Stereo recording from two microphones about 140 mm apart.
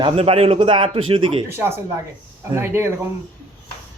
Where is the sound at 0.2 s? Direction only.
45° right (ahead or behind).